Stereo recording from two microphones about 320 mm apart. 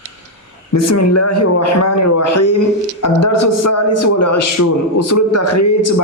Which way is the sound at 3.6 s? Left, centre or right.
Left.